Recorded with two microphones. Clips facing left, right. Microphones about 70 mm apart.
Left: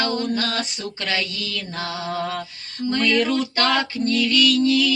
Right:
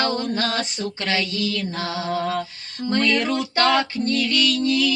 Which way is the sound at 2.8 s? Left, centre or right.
Right.